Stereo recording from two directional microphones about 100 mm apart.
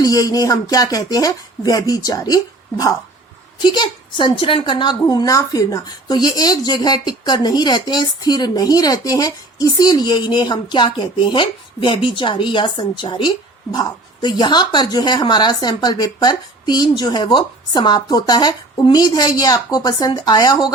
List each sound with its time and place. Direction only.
0.0 s speech: 40° left (ahead or behind)
3.6 s a woman's voice: 50° left (ahead or behind)